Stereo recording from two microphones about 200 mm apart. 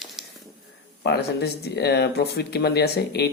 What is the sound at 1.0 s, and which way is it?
Speech, 55° left (ahead or behind).